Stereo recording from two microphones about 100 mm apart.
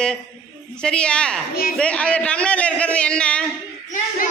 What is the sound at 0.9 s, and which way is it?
A man's voice, 10° left (ahead or behind).